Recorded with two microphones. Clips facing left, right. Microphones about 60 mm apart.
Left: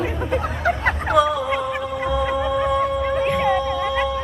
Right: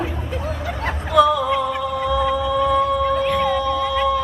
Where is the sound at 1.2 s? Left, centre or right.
Left.